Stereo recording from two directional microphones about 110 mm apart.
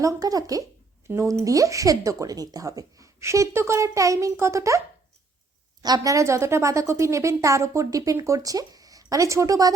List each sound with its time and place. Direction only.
0.0 s speech: 35° right (ahead or behind)
5.8 s speech: 35° right (ahead or behind)